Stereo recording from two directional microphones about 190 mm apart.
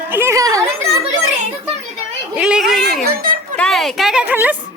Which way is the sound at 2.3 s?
5° right (ahead or behind).